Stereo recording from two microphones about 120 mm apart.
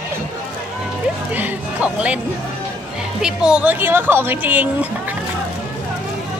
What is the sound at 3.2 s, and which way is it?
Speech, 5° right (ahead or behind).